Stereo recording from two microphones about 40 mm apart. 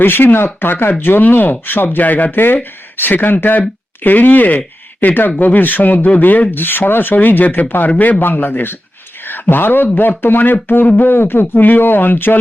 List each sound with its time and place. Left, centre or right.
0.0 s speech: left
6.5 s a man's voice: left
8.2 s speech: left
10.8 s speech: left
11.1 s speech: left